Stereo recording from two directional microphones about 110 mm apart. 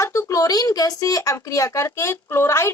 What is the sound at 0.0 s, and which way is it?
Speech, 30° left (ahead or behind).